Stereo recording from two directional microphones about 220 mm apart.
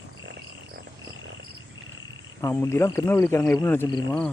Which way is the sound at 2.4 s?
10° left (ahead or behind).